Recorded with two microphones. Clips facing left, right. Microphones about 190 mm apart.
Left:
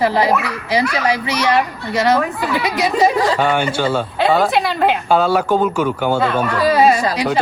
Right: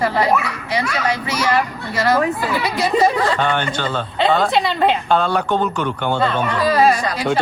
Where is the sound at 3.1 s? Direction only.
Centre (ahead or behind).